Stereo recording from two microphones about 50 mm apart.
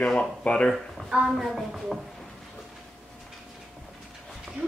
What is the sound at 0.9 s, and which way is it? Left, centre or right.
A woman's voice, centre.